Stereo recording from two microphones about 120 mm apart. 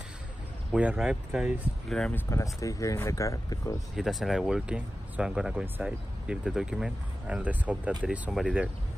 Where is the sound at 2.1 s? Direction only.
25° left (ahead or behind).